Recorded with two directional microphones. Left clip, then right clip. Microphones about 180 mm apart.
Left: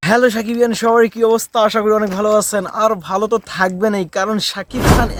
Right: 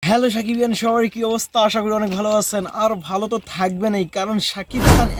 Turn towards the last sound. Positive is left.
turn(degrees=10)  # may be behind; listen again after turning